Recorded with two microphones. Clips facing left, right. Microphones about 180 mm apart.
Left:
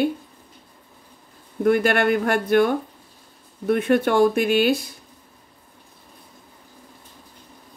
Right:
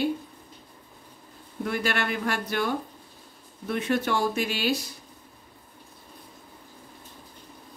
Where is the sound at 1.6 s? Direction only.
55° left (ahead or behind).